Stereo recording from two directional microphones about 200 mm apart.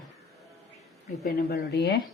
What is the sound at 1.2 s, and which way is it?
Speech, 55° left (ahead or behind).